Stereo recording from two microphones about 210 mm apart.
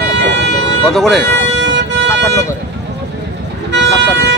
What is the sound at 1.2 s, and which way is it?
Vehicle, 55° right (ahead or behind).